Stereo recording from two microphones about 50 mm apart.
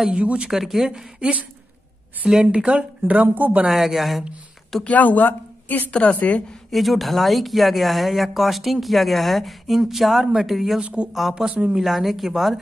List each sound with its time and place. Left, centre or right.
0.1 s speech: right
0.5 s speech: centre
2.4 s speech: right
3.3 s speech: right
3.6 s speech: centre
4.8 s speech: left
5.9 s a woman's voice: left
6.7 s speech: centre
10.8 s speech: right
11.1 s speech: centre
11.4 s speech: right
11.8 s speech: centre